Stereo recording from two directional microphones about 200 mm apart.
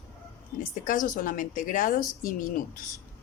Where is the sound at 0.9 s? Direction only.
40° left (ahead or behind).